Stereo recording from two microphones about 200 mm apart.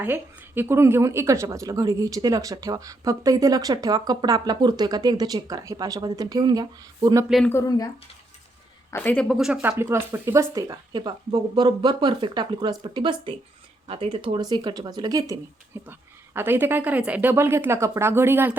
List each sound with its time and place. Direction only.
0.0 s a woman's voice: 10° right (ahead or behind)
7.3 s a woman's voice: centre (ahead or behind)
7.5 s speech: 15° left (ahead or behind)
8.9 s a woman's voice: 10° left (ahead or behind); by 18.5 s 10° right (ahead or behind)